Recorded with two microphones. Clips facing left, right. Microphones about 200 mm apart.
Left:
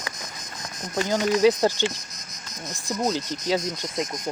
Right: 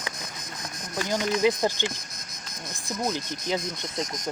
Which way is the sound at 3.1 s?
15° left (ahead or behind).